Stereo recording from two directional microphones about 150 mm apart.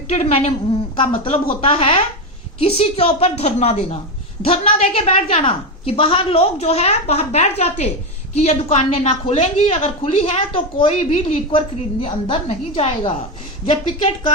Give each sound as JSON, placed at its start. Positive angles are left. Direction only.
{"t": 0.1, "sound": "a woman's voice", "side_deg": 45}